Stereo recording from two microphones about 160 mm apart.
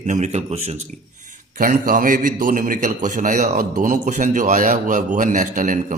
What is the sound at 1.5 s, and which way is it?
A man's voice, 60° right (ahead or behind).